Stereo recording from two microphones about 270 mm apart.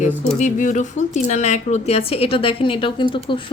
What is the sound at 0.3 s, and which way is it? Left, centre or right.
Speech, left.